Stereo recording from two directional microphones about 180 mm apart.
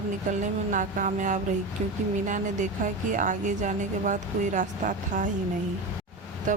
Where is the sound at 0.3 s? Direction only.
45° right (ahead or behind).